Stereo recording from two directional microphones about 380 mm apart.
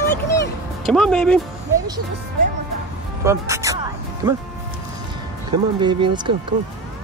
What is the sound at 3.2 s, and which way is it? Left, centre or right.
Speech, centre.